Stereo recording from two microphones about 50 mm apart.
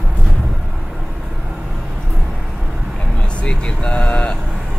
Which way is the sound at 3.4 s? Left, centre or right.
Centre.